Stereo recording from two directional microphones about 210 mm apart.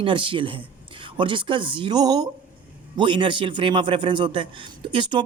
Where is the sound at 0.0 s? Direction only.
25° right (ahead or behind).